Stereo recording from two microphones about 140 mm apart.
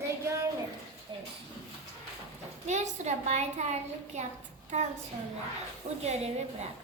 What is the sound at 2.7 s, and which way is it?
A child's voice, 55° right (ahead or behind).